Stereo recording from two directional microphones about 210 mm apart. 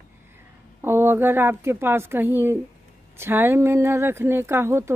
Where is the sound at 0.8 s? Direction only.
10° right (ahead or behind).